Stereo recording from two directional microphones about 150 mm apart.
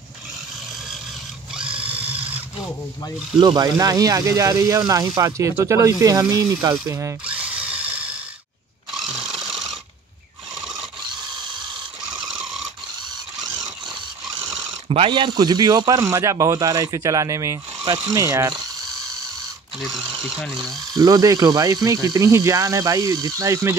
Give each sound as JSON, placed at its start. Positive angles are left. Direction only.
{"t": 1.5, "sound": "a sound", "side_deg": -5}
{"t": 3.3, "sound": "speech", "side_deg": -30}
{"t": 7.2, "sound": "drill", "side_deg": -10}
{"t": 8.9, "sound": "a sound", "side_deg": 0}
{"t": 11.1, "sound": "mechanisms", "side_deg": -30}
{"t": 13.8, "sound": "a sound", "side_deg": -25}
{"t": 14.9, "sound": "speech", "side_deg": -35}
{"t": 19.8, "sound": "speech", "side_deg": 0}
{"t": 20.9, "sound": "speech", "side_deg": -25}